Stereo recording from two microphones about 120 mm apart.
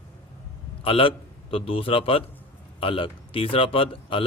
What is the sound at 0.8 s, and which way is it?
A man's voice, 50° left (ahead or behind).